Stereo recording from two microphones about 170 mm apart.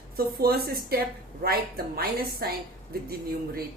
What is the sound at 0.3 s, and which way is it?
Speech, 65° right (ahead or behind).